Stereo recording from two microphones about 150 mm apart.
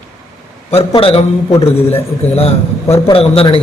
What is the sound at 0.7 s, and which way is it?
Speech, 40° left (ahead or behind).